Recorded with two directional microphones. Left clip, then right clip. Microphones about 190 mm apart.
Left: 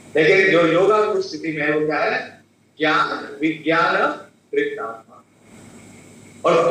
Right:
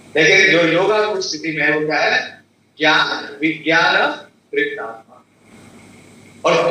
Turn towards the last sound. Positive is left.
turn(degrees=20)  # may be behind; listen again after turning